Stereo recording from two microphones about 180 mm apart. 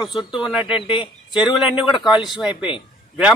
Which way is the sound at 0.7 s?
30° left (ahead or behind).